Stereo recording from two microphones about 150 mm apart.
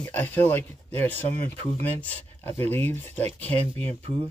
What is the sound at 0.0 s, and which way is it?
Speech, 10° left (ahead or behind).